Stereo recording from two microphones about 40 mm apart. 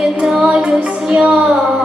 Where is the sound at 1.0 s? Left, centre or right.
Right.